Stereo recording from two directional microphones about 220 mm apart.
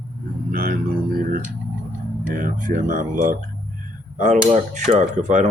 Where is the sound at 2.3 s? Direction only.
40° right (ahead or behind).